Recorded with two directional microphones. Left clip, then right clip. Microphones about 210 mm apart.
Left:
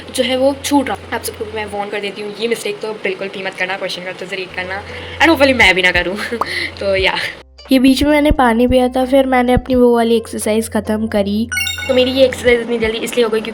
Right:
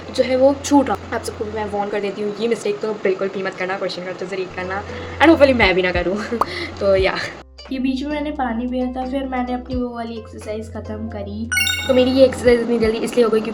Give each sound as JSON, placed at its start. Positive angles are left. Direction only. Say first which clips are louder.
{"t": 0.2, "sound": "speech", "louder": "left 1 dB", "side_deg": -5}
{"t": 7.7, "sound": "speech", "louder": "left 12 dB", "side_deg": 50}
{"t": 11.5, "sound": "speech", "louder": "left 1 dB", "side_deg": 0}